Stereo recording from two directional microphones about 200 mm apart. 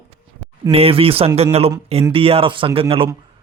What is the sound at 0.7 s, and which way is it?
A man's voice, 30° right (ahead or behind).